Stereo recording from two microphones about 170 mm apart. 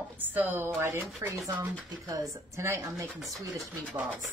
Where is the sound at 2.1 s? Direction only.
20° right (ahead or behind).